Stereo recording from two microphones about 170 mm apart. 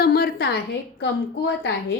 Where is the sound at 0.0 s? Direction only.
65° left (ahead or behind).